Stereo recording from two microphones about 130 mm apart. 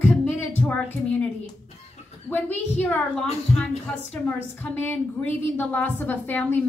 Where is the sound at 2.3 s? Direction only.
10° left (ahead or behind).